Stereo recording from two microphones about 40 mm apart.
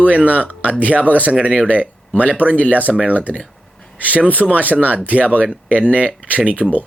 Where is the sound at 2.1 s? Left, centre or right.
Left.